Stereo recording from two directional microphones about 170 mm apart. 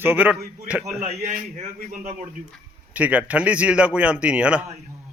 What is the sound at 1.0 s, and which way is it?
Speech, 45° right (ahead or behind).